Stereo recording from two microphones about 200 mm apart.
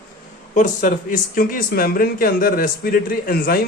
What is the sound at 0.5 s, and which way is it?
Speech, 40° left (ahead or behind).